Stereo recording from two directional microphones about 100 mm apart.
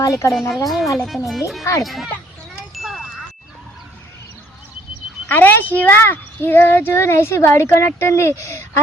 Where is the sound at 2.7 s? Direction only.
Centre (ahead or behind).